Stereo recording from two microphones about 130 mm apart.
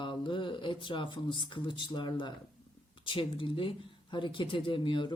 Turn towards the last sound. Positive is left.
turn(degrees=40)  # may be behind; listen again after turning